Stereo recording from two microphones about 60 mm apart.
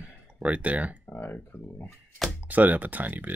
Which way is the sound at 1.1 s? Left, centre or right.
Left.